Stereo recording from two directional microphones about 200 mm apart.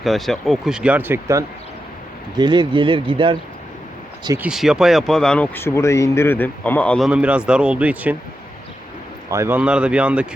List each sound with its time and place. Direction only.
0.0 s speech: centre (ahead or behind); by 3.3 s 25° right (ahead or behind)
4.4 s speech: 5° right (ahead or behind)
9.3 s speech: 10° right (ahead or behind)